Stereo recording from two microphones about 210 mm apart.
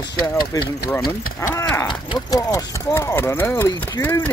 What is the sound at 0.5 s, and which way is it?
Speech, 15° left (ahead or behind).